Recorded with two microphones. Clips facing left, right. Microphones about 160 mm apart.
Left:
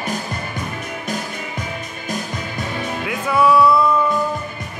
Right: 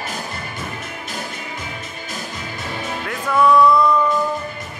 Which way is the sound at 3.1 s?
5° left (ahead or behind).